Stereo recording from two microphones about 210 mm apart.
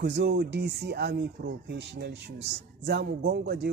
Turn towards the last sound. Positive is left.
turn(degrees=-50)  # may be behind; listen again after turning